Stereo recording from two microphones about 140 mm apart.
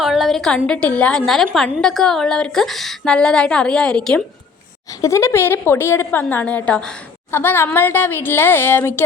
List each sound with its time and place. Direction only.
0.0 s a woman's voice: centre (ahead or behind)
4.9 s a woman's voice: 20° left (ahead or behind)